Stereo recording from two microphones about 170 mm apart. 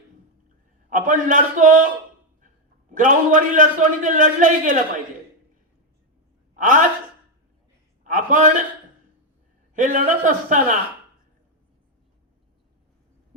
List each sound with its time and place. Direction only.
0.9 s a man's voice: 50° right (ahead or behind)
2.9 s a man's voice: 50° right (ahead or behind)
6.6 s speech: 50° right (ahead or behind)
8.0 s a sound: 50° right (ahead or behind)
9.7 s a man's voice: 50° right (ahead or behind)